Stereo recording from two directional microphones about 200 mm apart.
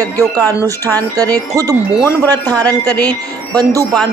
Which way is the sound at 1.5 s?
15° right (ahead or behind).